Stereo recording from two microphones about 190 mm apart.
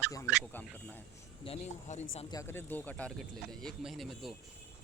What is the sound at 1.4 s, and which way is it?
Speech, 35° left (ahead or behind).